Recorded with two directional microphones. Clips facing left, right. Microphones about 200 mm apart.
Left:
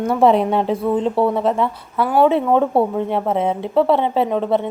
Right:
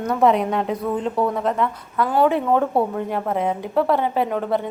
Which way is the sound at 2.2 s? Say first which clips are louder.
Left 4 dB; 20° left (ahead or behind).